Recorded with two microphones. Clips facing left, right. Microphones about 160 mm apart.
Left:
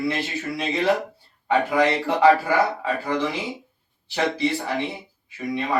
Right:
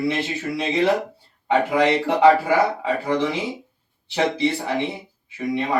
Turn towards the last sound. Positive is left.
turn(degrees=-20)  # may be behind; listen again after turning